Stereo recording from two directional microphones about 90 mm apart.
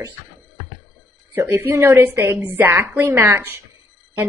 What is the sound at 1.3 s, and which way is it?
A woman's voice, 25° right (ahead or behind).